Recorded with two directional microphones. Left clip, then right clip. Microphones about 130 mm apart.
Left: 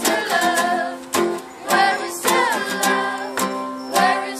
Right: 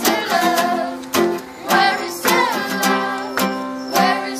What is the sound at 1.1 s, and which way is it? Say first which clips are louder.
Music: right 4 dB; 25° left (ahead or behind).